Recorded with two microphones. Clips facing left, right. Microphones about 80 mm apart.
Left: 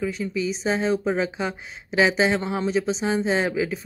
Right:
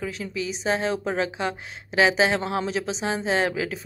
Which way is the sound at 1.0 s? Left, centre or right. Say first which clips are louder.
Left 2 dB; centre.